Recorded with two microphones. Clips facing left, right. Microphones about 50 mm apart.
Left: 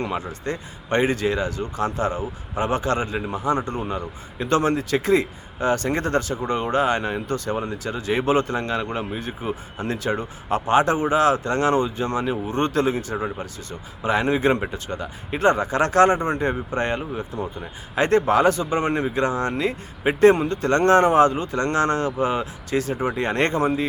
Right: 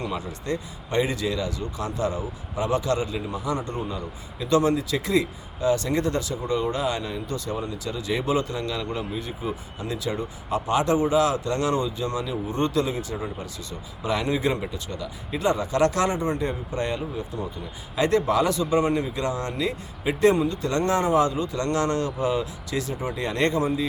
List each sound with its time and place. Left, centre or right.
0.0 s speech: left
14.0 s speech: left